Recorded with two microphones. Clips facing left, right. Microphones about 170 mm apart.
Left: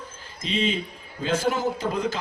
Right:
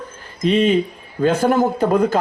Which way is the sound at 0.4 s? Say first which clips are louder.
Right 11 dB; 60° right (ahead or behind).